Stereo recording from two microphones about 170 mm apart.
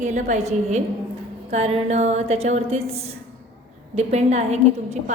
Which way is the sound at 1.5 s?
40° right (ahead or behind).